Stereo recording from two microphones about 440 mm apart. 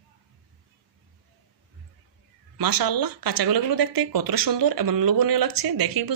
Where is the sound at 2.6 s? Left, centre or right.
Right.